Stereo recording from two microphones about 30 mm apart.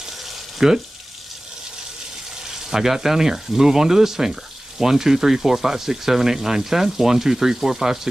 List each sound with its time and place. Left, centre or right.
0.6 s speech: right
2.5 s speech: centre